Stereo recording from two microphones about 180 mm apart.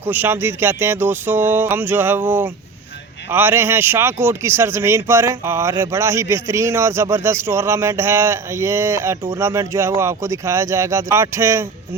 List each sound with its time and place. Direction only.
0.0 s speech: 10° right (ahead or behind)